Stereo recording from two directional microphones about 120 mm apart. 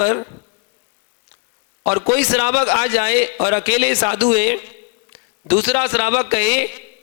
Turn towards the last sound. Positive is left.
turn(degrees=-25)  # may be behind; listen again after turning